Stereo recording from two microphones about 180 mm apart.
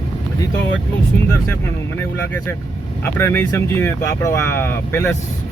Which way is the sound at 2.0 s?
10° left (ahead or behind).